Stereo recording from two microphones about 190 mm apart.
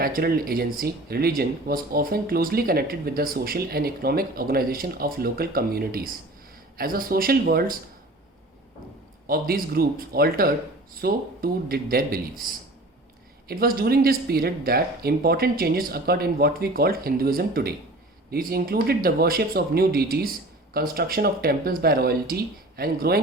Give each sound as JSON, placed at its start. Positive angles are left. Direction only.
{"t": 0.0, "sound": "speech", "side_deg": -50}
{"t": 9.2, "sound": "speech", "side_deg": -50}
{"t": 13.5, "sound": "speech", "side_deg": -50}